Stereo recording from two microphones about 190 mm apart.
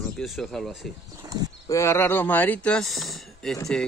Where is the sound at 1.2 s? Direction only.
20° right (ahead or behind).